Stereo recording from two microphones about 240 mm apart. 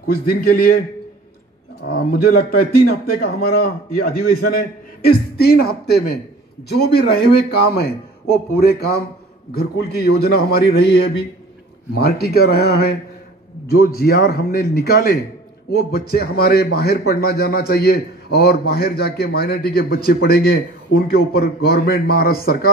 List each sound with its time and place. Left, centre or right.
0.0 s a man's voice: left
1.9 s a man's voice: left
12.0 s a man's voice: left